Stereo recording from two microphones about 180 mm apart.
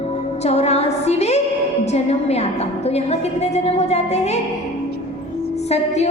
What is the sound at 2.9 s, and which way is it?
A woman's voice, 35° left (ahead or behind).